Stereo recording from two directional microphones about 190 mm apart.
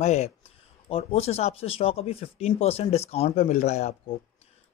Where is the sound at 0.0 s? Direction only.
35° left (ahead or behind).